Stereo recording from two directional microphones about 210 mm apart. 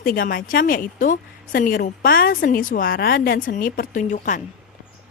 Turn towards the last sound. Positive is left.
turn(degrees=35)  # may be behind; listen again after turning